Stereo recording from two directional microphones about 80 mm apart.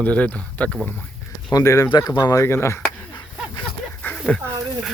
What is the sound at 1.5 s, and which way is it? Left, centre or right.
Speech, left.